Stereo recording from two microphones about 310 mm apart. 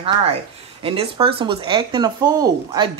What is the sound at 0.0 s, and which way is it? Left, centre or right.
A woman's voice, centre.